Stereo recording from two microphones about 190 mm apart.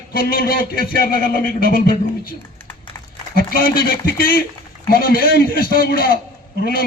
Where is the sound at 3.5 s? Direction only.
50° left (ahead or behind).